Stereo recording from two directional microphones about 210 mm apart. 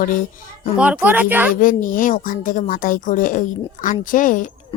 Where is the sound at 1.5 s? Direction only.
40° left (ahead or behind).